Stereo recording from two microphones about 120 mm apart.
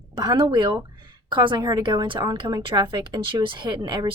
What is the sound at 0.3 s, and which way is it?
Speech, 40° right (ahead or behind).